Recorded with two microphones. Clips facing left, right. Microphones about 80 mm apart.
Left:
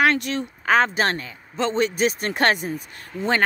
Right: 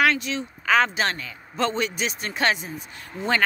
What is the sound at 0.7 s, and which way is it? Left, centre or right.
A man's voice, left.